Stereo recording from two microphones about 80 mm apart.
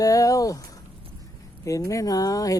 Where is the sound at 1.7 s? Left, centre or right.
Left.